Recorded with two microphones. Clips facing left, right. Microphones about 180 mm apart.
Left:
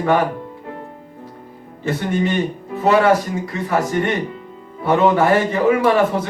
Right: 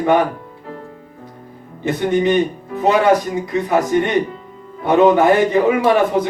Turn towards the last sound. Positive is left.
turn(degrees=-15)  # may be behind; listen again after turning